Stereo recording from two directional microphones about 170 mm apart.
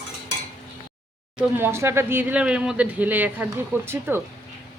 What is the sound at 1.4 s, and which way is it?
A man's voice, 10° right (ahead or behind).